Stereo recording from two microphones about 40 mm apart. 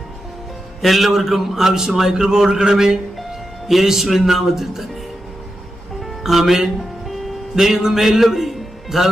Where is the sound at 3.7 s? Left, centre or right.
Centre.